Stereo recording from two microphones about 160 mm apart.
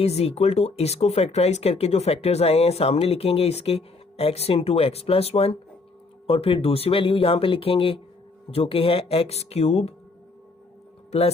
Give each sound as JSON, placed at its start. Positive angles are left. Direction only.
{"t": 0.0, "sound": "speech", "side_deg": 40}